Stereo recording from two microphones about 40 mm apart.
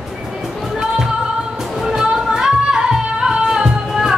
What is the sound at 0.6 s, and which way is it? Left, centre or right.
Music, centre.